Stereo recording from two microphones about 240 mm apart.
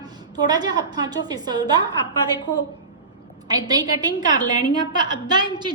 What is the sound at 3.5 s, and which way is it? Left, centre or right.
A woman's voice, centre.